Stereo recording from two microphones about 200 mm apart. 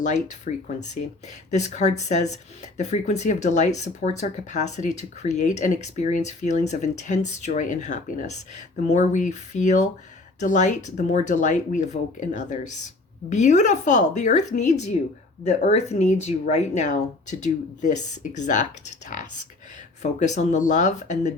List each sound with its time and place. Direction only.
0.0 s speech: 35° left (ahead or behind)